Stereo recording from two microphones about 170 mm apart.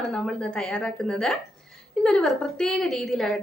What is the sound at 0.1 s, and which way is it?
A woman's voice, 5° left (ahead or behind).